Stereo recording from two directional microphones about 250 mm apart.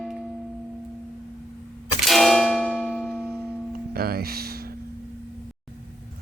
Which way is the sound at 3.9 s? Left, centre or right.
Right.